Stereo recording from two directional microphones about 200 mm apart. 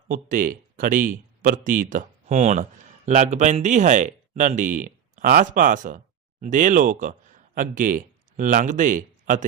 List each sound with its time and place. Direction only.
0.1 s speech: 45° right (ahead or behind)